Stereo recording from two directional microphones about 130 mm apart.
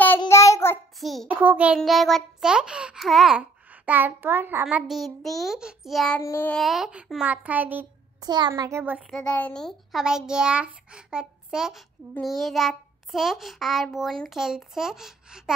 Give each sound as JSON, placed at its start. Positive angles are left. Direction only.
{"t": 0.3, "sound": "child singing", "side_deg": 20}
{"t": 0.9, "sound": "a child's voice", "side_deg": 0}
{"t": 1.3, "sound": "a child's voice", "side_deg": -10}
{"t": 1.8, "sound": "a child's voice", "side_deg": 0}
{"t": 6.2, "sound": "child singing", "side_deg": 15}
{"t": 6.5, "sound": "a child's voice", "side_deg": 0}
{"t": 8.2, "sound": "a child's voice", "side_deg": -35}
{"t": 9.1, "sound": "a child's voice", "side_deg": 10}